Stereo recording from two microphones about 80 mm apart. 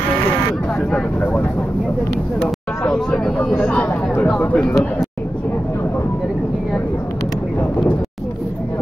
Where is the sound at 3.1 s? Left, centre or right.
Centre.